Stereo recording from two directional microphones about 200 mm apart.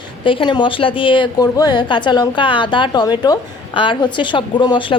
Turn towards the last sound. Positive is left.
turn(degrees=25)  # may be behind; listen again after turning